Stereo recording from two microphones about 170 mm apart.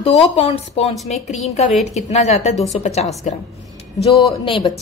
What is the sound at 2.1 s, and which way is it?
Speech, 40° left (ahead or behind).